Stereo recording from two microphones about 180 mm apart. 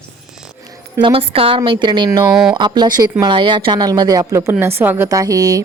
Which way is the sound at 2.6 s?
25° right (ahead or behind).